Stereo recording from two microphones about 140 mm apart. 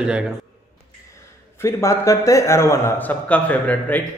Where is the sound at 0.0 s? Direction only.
5° right (ahead or behind).